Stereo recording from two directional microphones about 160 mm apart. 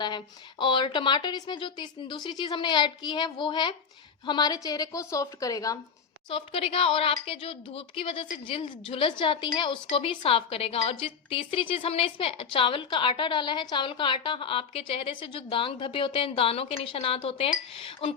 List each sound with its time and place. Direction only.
0.6 s speech: 30° left (ahead or behind)
6.2 s a woman's voice: 35° left (ahead or behind)